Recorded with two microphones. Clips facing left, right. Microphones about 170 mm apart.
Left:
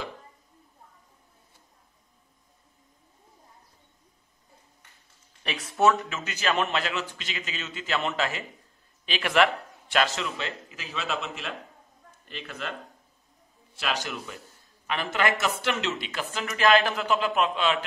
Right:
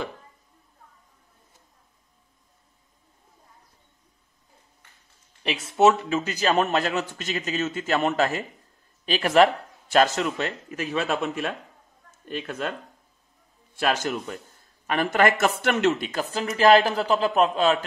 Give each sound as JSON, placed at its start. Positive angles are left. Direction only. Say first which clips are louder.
{"t": 5.8, "sound": "a man's voice", "louder": "right 4 dB", "side_deg": -25}
{"t": 13.7, "sound": "a man's voice", "louder": "right 7 dB", "side_deg": -50}